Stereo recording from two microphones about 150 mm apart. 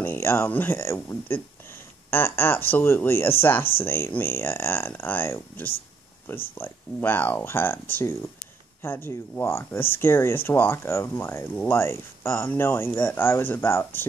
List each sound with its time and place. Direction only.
0.0 s speech: 15° left (ahead or behind)